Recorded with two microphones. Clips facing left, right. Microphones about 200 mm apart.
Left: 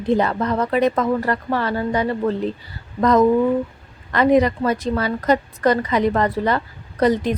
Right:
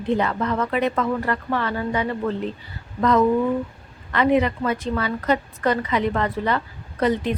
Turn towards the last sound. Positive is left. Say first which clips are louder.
# left 3 dB
turn(degrees=40)  # may be behind; listen again after turning